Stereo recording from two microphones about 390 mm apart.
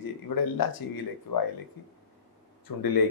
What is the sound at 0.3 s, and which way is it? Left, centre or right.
Speech, left.